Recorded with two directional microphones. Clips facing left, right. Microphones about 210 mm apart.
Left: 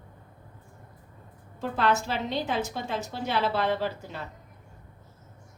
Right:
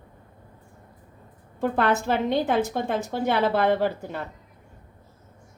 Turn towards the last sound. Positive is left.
turn(degrees=-55)  # may be behind; listen again after turning